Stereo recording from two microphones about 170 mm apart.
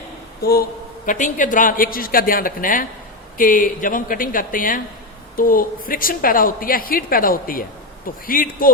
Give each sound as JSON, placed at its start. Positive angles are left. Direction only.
{"t": 1.0, "sound": "a woman's voice", "side_deg": 50}